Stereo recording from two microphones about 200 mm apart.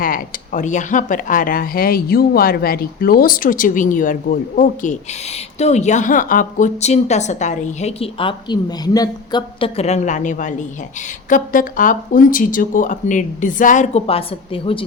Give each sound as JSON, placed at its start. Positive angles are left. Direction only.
{"t": 0.0, "sound": "a woman's voice", "side_deg": 40}